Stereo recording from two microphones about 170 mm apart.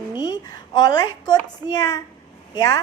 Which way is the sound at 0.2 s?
25° left (ahead or behind).